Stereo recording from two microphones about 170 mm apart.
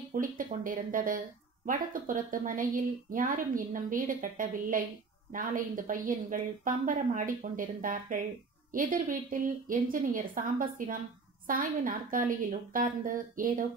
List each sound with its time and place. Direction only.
0.1 s a woman's voice: 55° right (ahead or behind)